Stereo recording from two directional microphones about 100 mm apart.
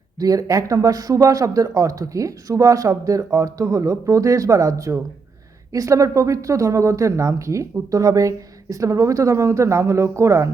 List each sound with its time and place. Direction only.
0.2 s speech: 35° right (ahead or behind)